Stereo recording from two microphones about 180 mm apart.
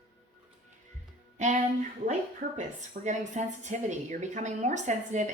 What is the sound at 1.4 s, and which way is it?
A woman's voice, 40° right (ahead or behind).